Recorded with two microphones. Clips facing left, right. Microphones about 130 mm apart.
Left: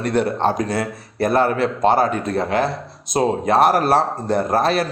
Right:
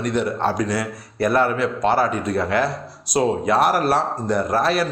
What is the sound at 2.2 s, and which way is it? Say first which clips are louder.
Speech: left 1 dB; 40° left (ahead or behind).